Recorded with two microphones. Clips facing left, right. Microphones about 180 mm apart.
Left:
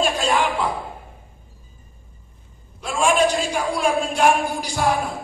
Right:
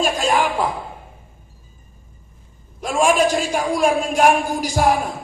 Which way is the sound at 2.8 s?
45° right (ahead or behind).